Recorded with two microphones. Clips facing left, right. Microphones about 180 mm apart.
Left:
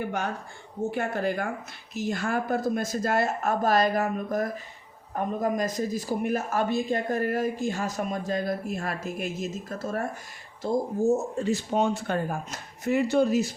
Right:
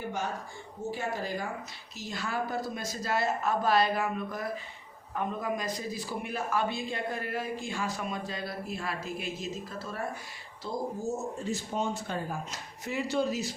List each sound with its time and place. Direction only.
0.9 s speech: 60° left (ahead or behind)
11.3 s speech: 75° left (ahead or behind); by 13.5 s 50° left (ahead or behind)